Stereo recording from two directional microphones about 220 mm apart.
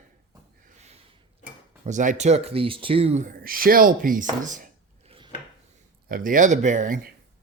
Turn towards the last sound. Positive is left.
turn(degrees=-35)  # may be behind; listen again after turning